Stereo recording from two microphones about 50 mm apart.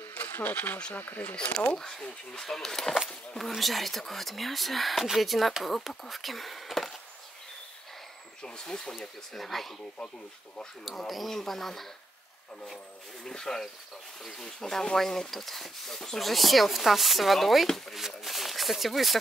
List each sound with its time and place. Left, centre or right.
0.1 s a sound: left
0.9 s speech: left
1.8 s speech: centre
8.4 s speech: centre
13.2 s speech: centre